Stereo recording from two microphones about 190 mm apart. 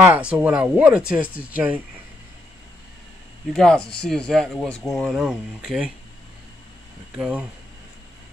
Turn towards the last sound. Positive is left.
turn(degrees=-5)  # may be behind; listen again after turning